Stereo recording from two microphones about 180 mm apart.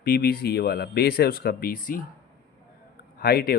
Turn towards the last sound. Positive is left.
turn(degrees=60)  # may be behind; listen again after turning